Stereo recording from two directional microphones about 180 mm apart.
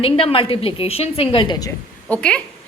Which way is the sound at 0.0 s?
30° left (ahead or behind).